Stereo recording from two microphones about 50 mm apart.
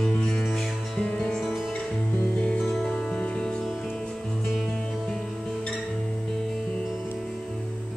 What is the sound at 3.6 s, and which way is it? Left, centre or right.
Music, centre.